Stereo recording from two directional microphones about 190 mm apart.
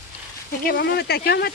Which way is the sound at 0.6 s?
60° left (ahead or behind).